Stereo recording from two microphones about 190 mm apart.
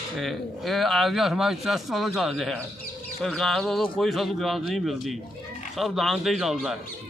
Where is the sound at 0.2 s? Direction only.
Centre (ahead or behind).